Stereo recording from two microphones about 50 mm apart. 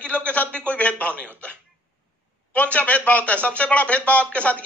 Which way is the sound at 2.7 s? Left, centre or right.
Left.